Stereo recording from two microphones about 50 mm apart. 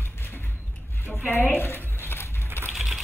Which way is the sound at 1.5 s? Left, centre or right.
Left.